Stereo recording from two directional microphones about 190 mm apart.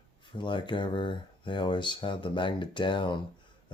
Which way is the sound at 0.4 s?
25° left (ahead or behind).